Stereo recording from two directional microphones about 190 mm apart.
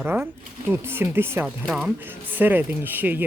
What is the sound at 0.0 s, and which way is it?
Speech, 10° right (ahead or behind).